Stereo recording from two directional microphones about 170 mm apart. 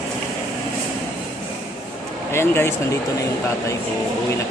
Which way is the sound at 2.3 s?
15° left (ahead or behind).